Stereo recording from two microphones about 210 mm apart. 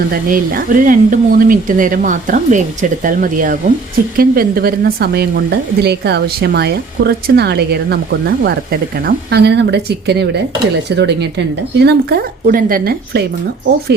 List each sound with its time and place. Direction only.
0.1 s speech: 45° right (ahead or behind)